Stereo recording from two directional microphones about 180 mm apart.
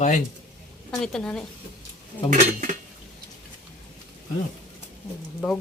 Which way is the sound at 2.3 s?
45° right (ahead or behind).